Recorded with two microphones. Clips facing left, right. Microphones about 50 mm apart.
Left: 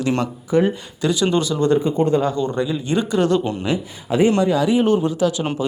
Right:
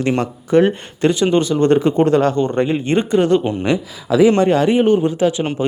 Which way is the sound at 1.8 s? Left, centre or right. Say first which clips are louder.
Right 4 dB; right.